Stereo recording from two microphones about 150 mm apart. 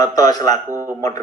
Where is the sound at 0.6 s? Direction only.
15° right (ahead or behind).